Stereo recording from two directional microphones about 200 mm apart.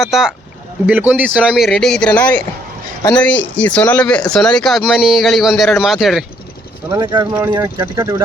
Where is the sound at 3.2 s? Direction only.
5° left (ahead or behind).